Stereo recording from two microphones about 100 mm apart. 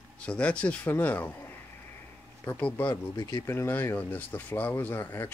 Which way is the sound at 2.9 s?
45° left (ahead or behind).